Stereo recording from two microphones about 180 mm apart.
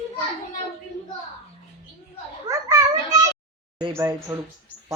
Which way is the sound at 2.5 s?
20° right (ahead or behind).